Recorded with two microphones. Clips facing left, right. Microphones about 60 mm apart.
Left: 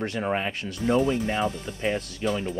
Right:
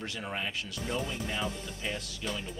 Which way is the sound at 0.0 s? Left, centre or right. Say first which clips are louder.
Left 9 dB; left.